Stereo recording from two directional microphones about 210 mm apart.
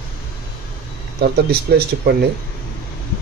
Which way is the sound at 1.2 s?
50° right (ahead or behind).